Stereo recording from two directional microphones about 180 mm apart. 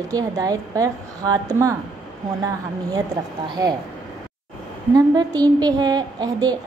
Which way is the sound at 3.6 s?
20° right (ahead or behind).